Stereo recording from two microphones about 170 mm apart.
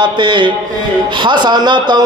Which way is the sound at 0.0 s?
25° right (ahead or behind).